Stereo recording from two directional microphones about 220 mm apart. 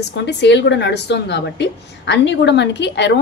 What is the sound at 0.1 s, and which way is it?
A woman's voice, 50° left (ahead or behind).